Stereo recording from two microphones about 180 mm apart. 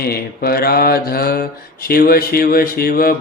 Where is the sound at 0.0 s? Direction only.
55° left (ahead or behind).